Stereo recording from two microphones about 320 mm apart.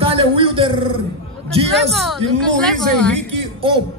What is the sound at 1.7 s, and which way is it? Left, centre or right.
A woman's voice, centre.